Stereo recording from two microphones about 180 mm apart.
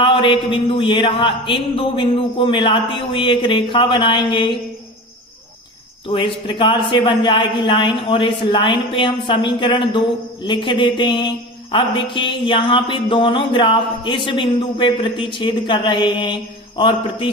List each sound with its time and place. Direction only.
0.0 s speech: 30° left (ahead or behind)
6.1 s speech: 30° left (ahead or behind)